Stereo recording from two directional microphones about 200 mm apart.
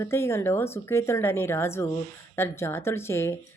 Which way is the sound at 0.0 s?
10° left (ahead or behind).